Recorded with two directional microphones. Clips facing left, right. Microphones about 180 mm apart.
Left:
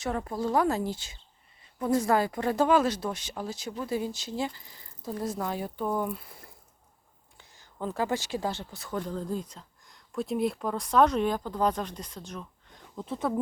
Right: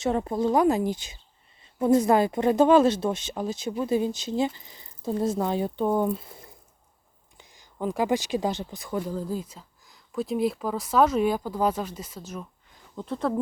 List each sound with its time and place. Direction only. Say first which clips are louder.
0.0 s speech: right 6 dB; 25° right (ahead or behind); by 13.4 s centre (ahead or behind)